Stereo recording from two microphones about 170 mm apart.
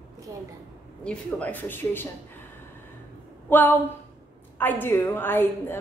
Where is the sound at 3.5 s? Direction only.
10° left (ahead or behind).